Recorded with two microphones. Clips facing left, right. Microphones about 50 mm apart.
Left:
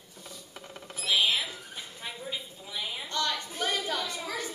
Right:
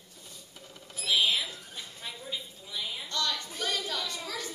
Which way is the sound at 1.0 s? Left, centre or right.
Centre.